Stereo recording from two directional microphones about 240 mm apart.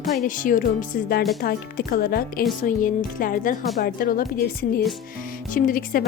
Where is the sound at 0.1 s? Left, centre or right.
Left.